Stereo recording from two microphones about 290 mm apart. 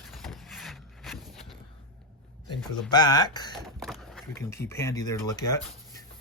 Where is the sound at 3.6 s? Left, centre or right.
Centre.